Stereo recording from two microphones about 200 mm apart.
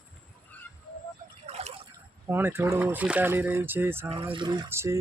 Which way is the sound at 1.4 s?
30° right (ahead or behind).